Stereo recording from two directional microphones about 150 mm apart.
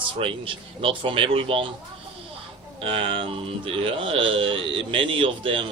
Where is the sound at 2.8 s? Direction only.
40° right (ahead or behind).